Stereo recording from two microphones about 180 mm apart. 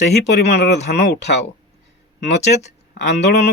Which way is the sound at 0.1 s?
65° left (ahead or behind).